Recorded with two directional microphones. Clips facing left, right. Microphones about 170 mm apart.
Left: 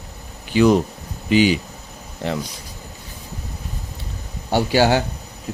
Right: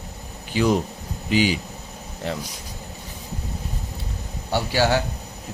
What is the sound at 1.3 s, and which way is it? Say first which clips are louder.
Speech: left 5 dB; 65° left (ahead or behind).